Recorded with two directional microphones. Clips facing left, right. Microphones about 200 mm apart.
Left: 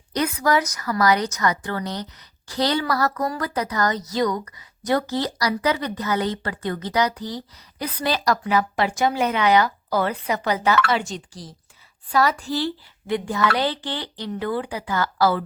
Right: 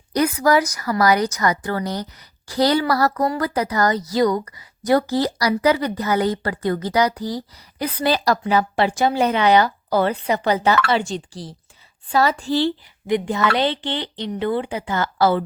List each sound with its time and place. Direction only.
0.1 s a woman's voice: 35° right (ahead or behind)